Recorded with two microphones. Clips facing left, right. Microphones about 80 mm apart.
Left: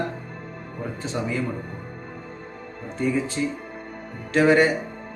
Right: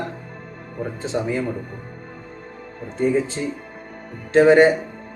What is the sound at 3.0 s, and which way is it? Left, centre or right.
Speech, right.